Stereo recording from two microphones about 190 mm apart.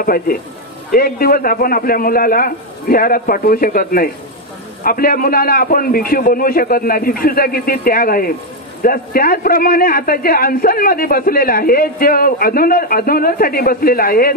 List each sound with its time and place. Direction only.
0.0 s a man's voice: 50° left (ahead or behind)